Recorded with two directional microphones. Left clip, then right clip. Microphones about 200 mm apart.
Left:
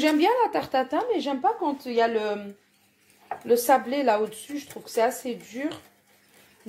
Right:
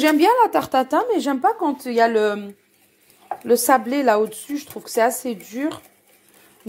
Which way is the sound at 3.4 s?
40° right (ahead or behind).